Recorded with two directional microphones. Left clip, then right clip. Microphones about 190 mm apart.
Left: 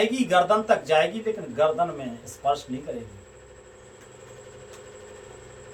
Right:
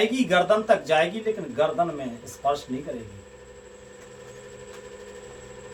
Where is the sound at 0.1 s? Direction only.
15° right (ahead or behind).